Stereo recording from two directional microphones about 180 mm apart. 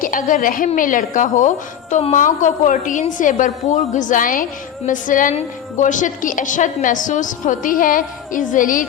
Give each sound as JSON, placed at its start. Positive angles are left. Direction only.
{"t": 0.0, "sound": "a woman's voice", "side_deg": 50}